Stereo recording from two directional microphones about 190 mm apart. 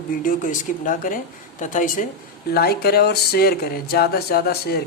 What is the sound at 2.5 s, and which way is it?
Speech, 55° left (ahead or behind).